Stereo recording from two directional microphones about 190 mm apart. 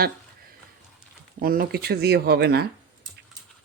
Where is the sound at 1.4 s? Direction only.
50° right (ahead or behind).